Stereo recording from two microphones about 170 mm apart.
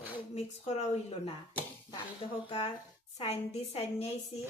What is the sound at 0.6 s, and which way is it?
Speech, 40° left (ahead or behind).